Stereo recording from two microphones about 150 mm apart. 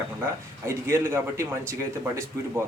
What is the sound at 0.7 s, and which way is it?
A man's voice, 15° right (ahead or behind).